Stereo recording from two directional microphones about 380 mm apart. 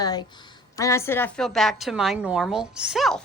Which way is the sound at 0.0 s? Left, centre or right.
Centre.